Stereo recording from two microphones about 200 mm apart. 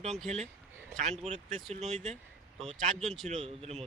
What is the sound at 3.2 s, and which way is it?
Speech, 30° right (ahead or behind).